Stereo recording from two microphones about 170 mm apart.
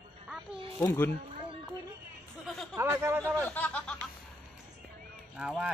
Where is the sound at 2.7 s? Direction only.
15° right (ahead or behind).